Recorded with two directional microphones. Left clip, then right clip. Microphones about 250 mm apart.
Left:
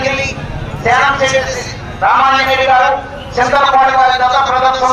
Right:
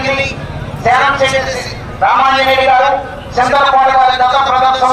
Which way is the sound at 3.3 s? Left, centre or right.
Right.